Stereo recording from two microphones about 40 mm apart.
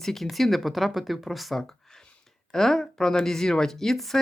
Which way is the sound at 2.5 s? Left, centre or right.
Centre.